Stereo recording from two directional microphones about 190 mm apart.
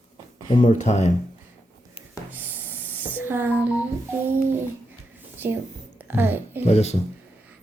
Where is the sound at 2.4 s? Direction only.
10° right (ahead or behind).